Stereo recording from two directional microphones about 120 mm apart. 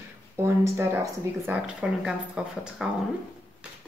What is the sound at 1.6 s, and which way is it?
Speech, 10° right (ahead or behind).